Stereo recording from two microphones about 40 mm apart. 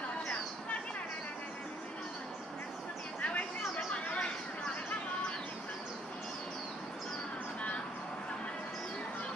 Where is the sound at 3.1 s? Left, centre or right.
Left.